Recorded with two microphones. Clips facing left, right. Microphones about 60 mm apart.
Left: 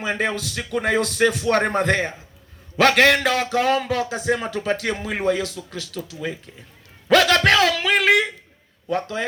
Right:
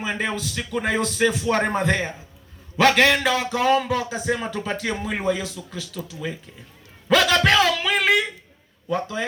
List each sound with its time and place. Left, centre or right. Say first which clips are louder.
0.0 s speech: left 2 dB; left
7.1 s a sound: left 2 dB; left
8.9 s speech: left 1 dB; left